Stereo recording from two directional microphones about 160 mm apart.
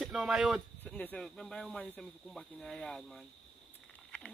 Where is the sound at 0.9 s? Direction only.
5° left (ahead or behind).